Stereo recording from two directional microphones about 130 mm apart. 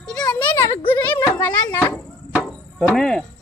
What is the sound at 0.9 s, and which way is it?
Speech, 15° left (ahead or behind).